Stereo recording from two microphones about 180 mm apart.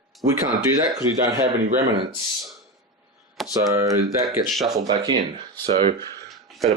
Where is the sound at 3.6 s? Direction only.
20° right (ahead or behind).